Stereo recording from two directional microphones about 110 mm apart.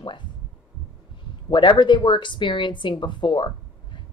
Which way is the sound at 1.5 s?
45° left (ahead or behind).